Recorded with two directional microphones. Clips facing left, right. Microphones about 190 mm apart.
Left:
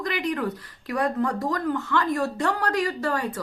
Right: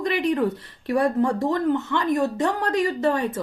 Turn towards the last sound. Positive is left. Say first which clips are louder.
# right 5 dB
turn(degrees=-20)  # may be behind; listen again after turning